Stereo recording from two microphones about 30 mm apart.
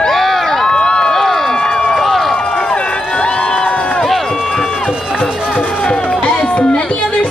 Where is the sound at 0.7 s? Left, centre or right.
Left.